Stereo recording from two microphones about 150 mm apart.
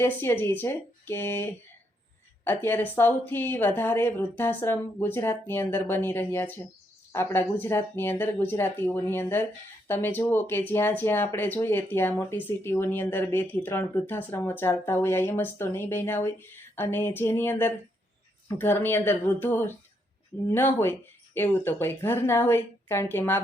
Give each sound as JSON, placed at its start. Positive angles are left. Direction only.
{"t": 0.0, "sound": "speech", "side_deg": 15}